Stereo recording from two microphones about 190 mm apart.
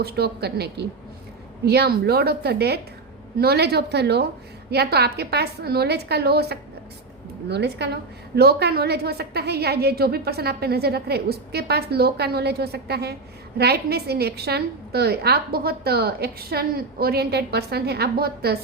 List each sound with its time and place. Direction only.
0.0 s a woman's voice: 60° right (ahead or behind)